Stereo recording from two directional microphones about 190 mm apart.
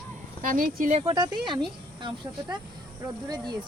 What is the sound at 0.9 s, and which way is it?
A woman's voice, 20° right (ahead or behind).